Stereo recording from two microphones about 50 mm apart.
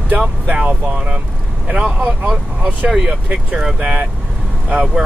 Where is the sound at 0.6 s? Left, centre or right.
Centre.